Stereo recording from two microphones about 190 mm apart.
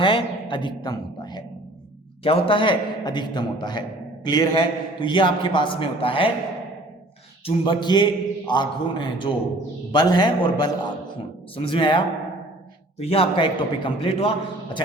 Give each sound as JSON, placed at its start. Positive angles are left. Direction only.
{"t": 0.0, "sound": "a woman's voice", "side_deg": 25}
{"t": 7.4, "sound": "a man's voice", "side_deg": 25}